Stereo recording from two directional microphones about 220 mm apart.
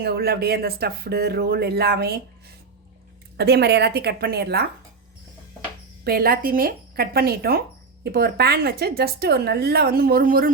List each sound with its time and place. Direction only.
0.0 s a woman's voice: 45° right (ahead or behind)
3.3 s a woman's voice: 50° right (ahead or behind)
6.1 s a woman's voice: 40° right (ahead or behind)